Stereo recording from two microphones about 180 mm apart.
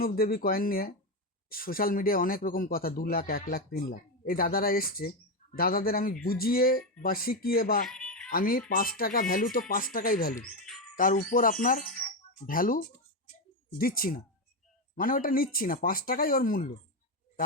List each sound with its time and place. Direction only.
0.0 s speech: 55° left (ahead or behind)
7.9 s a sound: 5° left (ahead or behind)
8.3 s speech: 55° left (ahead or behind)